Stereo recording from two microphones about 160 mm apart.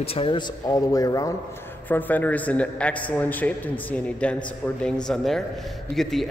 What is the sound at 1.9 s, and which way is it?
A man's voice, 10° left (ahead or behind).